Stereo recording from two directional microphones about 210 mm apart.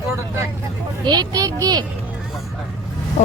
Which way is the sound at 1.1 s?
20° right (ahead or behind).